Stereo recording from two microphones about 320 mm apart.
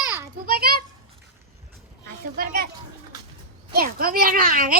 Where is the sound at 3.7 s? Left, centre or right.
Right.